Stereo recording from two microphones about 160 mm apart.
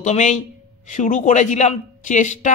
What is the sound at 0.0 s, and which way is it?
A man's voice, 50° left (ahead or behind).